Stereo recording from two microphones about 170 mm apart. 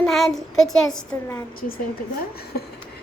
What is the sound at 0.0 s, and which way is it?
Speech, centre (ahead or behind).